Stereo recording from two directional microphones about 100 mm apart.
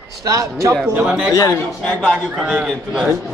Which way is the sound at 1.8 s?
5° left (ahead or behind).